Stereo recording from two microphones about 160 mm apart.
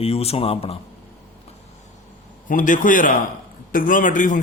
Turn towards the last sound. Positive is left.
turn(degrees=55)  # may be behind; listen again after turning